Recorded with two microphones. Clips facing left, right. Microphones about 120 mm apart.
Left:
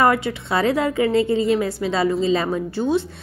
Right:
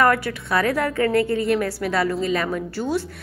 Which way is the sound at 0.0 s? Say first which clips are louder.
Left 1 dB; 20° left (ahead or behind).